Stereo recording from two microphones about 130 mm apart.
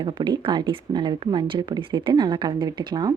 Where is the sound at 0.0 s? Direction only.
35° right (ahead or behind).